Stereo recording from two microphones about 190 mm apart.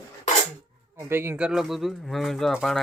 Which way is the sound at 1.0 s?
15° right (ahead or behind).